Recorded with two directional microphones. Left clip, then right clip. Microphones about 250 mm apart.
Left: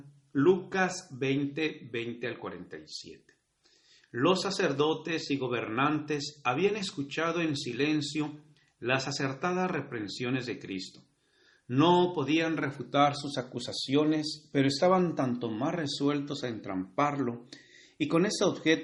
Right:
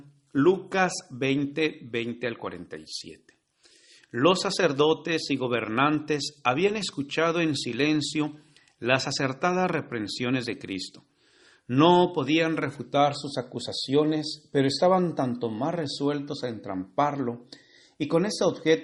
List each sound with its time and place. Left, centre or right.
0.3 s a man's voice: right
12.9 s a man's voice: right